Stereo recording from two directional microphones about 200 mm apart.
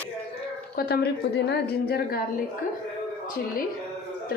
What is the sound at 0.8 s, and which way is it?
Speech, 50° left (ahead or behind).